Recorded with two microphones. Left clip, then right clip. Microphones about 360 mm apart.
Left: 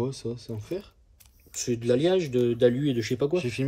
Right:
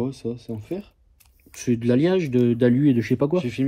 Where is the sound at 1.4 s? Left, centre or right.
Centre.